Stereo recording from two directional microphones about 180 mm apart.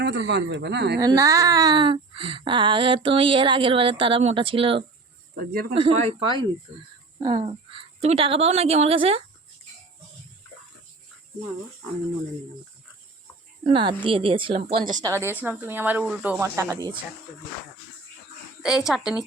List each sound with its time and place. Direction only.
0.0 s speech: 75° right (ahead or behind)
0.9 s a woman's voice: 20° right (ahead or behind)
13.7 s speech: 25° right (ahead or behind)
14.6 s a woman's voice: 45° right (ahead or behind)
15.0 s speech: 15° right (ahead or behind)
18.6 s a woman's voice: 5° right (ahead or behind)